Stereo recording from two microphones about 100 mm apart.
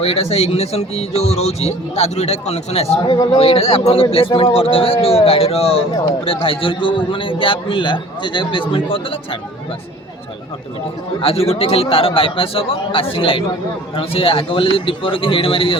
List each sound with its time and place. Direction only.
0.0 s a man's voice: 80° left
3.4 s a man's voice: 75° left (ahead or behind); by 9.0 s 60° left (ahead or behind)
11.2 s a man's voice: 70° left (ahead or behind)